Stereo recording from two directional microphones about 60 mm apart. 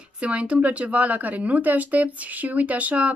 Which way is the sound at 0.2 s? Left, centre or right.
Right.